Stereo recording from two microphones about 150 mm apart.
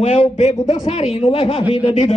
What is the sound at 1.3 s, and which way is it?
Speech, 35° left (ahead or behind).